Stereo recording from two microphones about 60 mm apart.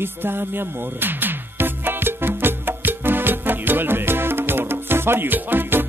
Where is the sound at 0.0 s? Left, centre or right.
Right.